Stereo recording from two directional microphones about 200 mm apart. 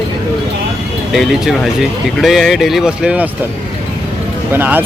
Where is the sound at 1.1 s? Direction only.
Centre (ahead or behind).